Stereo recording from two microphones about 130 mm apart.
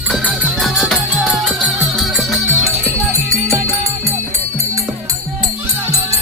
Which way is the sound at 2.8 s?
25° right (ahead or behind).